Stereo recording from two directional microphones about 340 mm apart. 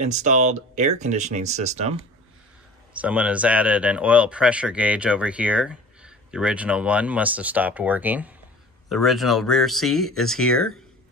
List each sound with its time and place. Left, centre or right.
0.0 s speech: right
3.0 s speech: centre